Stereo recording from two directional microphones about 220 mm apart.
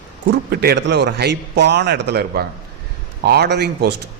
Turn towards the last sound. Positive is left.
turn(degrees=-50)  # may be behind; listen again after turning